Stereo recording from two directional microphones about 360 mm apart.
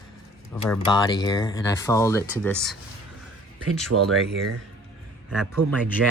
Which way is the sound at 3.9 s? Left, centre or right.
Right.